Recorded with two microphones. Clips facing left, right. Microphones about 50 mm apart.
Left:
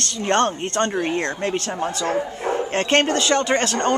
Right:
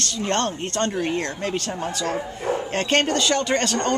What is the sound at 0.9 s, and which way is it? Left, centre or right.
Speech, centre.